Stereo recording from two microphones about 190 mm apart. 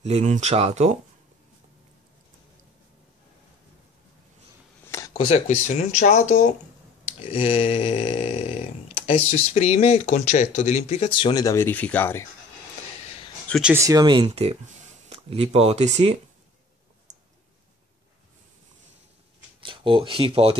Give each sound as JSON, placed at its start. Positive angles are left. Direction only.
{"t": 0.0, "sound": "speech", "side_deg": -35}
{"t": 4.8, "sound": "a sound", "side_deg": 15}
{"t": 5.1, "sound": "speech", "side_deg": 30}
{"t": 7.1, "sound": "a sound", "side_deg": 30}
{"t": 13.5, "sound": "speech", "side_deg": -5}
{"t": 13.7, "sound": "speech", "side_deg": -20}
{"t": 19.6, "sound": "speech", "side_deg": -25}